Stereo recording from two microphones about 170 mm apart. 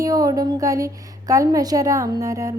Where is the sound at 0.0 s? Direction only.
20° right (ahead or behind).